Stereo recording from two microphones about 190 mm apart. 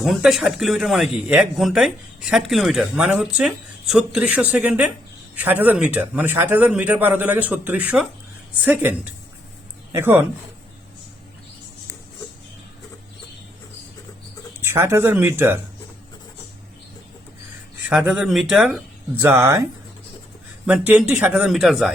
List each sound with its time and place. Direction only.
0.0 s speech: centre (ahead or behind)
14.6 s speech: 15° right (ahead or behind)
17.8 s speech: 5° right (ahead or behind)
19.2 s speech: 15° right (ahead or behind)
20.7 s speech: 5° right (ahead or behind)